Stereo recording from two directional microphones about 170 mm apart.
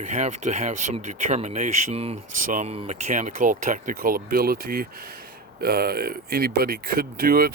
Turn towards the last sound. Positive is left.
turn(degrees=-60)  # may be behind; listen again after turning